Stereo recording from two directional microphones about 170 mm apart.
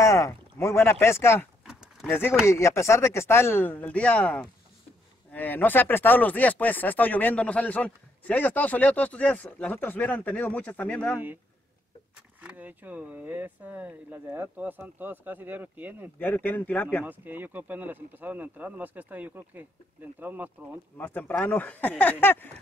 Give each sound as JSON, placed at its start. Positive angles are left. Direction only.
{"t": 0.0, "sound": "speech", "side_deg": 20}
{"t": 1.7, "sound": "a sound", "side_deg": -5}
{"t": 2.0, "sound": "speech", "side_deg": 10}
{"t": 12.4, "sound": "speech", "side_deg": -10}
{"t": 16.2, "sound": "speech", "side_deg": 10}
{"t": 17.0, "sound": "speech", "side_deg": -10}
{"t": 21.0, "sound": "speech", "side_deg": 10}